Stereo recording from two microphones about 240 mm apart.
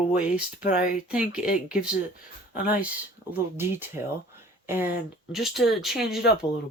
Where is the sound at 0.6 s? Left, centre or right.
Left.